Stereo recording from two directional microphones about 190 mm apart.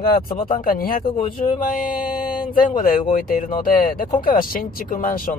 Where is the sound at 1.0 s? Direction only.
25° left (ahead or behind).